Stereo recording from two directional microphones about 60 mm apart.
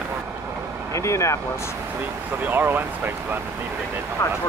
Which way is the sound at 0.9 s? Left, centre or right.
Left.